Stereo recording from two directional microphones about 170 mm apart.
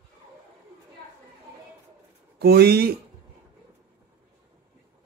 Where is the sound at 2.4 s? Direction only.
70° right (ahead or behind).